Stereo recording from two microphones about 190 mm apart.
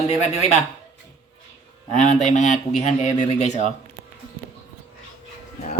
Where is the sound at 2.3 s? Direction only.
40° left (ahead or behind).